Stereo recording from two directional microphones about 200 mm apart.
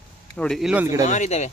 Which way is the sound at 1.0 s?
35° left (ahead or behind).